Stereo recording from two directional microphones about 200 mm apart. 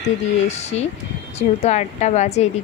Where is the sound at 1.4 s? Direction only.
35° left (ahead or behind).